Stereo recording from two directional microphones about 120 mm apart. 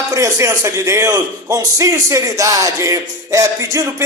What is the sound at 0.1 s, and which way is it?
Speech, 25° right (ahead or behind).